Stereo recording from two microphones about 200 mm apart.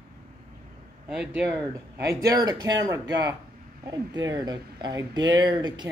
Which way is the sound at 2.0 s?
15° right (ahead or behind).